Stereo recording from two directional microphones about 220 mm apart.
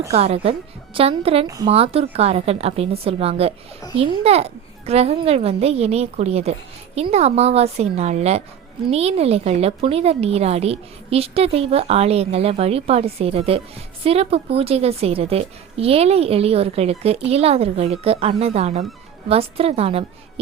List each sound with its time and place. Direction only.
0.1 s a woman's voice: 30° right (ahead or behind)
1.5 s speech: 15° right (ahead or behind)
1.7 s a woman's voice: 25° right (ahead or behind)